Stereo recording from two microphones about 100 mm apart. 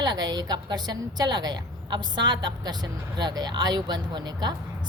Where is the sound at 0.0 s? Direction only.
45° right (ahead or behind).